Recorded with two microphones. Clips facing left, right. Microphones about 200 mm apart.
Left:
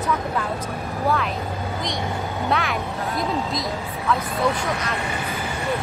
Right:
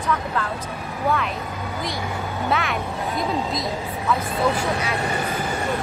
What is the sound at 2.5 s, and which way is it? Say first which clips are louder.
Speech: even; centre (ahead or behind).